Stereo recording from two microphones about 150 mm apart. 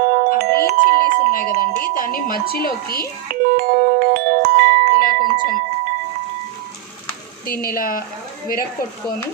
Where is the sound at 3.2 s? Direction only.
80° right.